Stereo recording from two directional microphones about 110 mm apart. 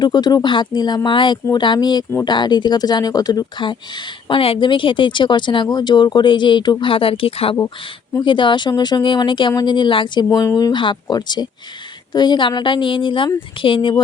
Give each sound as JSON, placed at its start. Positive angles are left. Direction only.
{"t": 0.0, "sound": "speech", "side_deg": 40}
{"t": 8.2, "sound": "speech", "side_deg": 50}
{"t": 10.2, "sound": "speech", "side_deg": 30}
{"t": 10.8, "sound": "speech", "side_deg": 45}